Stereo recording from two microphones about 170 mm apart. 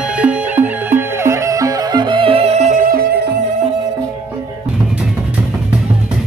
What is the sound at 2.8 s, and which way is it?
Music, 60° right (ahead or behind).